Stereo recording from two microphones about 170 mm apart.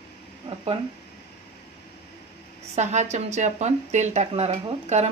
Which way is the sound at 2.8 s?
45° right (ahead or behind).